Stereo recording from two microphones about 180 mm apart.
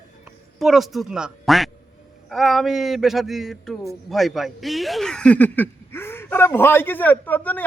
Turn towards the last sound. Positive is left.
turn(degrees=10)  # may be behind; listen again after turning